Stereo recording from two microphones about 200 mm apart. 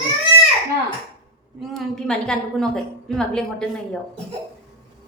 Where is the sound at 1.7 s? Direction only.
5° left (ahead or behind).